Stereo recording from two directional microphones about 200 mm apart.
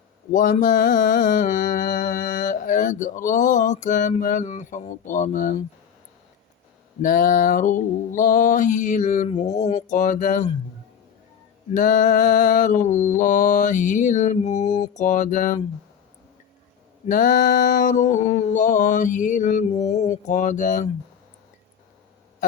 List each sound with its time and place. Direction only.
0.3 s mantra: 45° left (ahead or behind)
7.0 s mantra: 45° left (ahead or behind)
11.7 s mantra: 40° left (ahead or behind)
17.1 s mantra: 45° left (ahead or behind)